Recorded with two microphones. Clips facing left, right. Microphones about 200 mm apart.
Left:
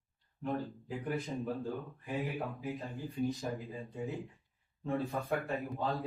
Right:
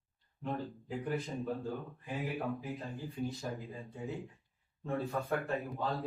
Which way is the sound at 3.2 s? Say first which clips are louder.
Left 4 dB; 15° left (ahead or behind).